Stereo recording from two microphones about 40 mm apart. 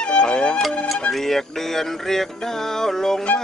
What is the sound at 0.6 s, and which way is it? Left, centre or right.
Music, centre.